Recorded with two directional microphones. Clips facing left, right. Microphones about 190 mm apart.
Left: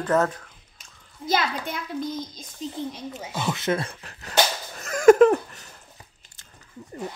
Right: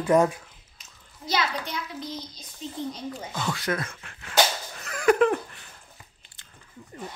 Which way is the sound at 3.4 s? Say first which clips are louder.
Left 4 dB; 20° left (ahead or behind).